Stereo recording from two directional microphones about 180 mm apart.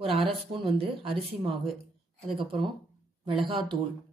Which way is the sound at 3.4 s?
25° right (ahead or behind).